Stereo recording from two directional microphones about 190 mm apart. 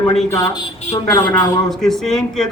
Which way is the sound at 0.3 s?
20° left (ahead or behind).